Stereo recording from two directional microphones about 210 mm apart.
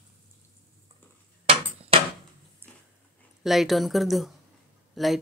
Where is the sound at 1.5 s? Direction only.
30° right (ahead or behind).